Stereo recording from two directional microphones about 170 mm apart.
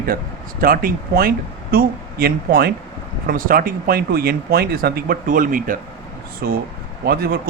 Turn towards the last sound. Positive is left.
turn(degrees=-60)  # may be behind; listen again after turning